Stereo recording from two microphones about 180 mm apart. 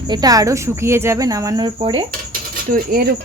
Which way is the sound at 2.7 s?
55° right (ahead or behind).